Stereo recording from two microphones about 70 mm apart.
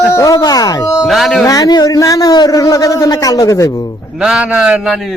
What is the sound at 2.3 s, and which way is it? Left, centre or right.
Speech, left.